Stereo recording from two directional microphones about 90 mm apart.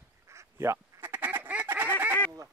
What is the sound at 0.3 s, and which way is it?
Duck, 30° right (ahead or behind).